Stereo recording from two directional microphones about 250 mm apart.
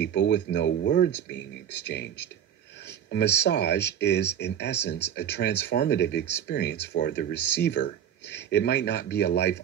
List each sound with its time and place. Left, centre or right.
0.0 s speech: left
3.1 s speech: left